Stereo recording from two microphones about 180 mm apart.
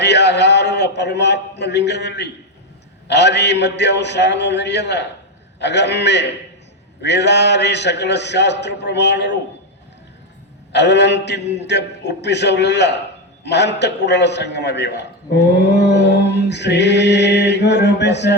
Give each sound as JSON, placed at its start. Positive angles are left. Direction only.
{"t": 0.0, "sound": "a man's voice", "side_deg": 70}
{"t": 10.7, "sound": "a man's voice", "side_deg": 70}